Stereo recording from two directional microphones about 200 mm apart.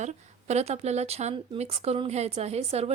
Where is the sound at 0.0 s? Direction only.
35° right (ahead or behind).